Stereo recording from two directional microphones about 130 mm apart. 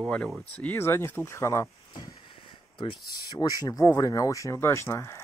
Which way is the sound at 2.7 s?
40° left (ahead or behind).